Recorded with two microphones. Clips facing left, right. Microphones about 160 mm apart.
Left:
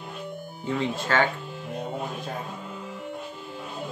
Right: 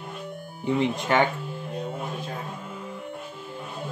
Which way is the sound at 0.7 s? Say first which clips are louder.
Right 3 dB; 20° right (ahead or behind).